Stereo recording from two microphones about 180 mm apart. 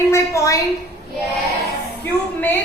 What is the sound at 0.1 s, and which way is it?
Speech, 15° left (ahead or behind).